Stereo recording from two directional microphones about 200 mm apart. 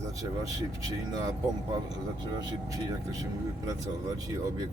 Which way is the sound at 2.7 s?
20° right (ahead or behind).